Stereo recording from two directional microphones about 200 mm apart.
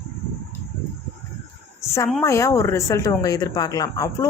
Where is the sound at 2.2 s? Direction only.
15° left (ahead or behind).